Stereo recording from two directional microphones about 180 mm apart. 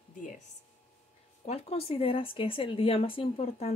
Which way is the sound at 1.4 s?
35° left (ahead or behind).